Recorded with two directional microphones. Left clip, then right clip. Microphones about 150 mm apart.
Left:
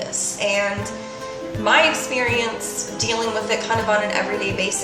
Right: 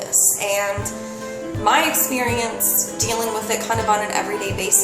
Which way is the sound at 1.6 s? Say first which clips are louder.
Left 1 dB; 25° right (ahead or behind).